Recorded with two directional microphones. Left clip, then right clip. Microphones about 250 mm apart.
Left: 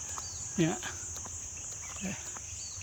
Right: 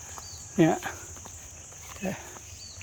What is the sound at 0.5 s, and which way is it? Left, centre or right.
Speech, centre.